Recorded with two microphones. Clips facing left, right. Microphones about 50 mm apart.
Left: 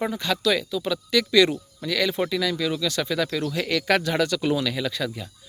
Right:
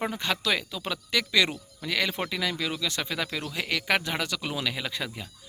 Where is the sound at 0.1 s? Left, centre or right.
Right.